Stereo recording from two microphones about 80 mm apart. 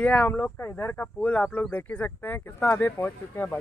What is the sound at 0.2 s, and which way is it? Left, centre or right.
Speech, left.